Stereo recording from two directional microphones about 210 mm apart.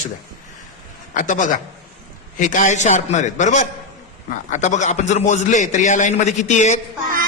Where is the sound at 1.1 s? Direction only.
35° left (ahead or behind).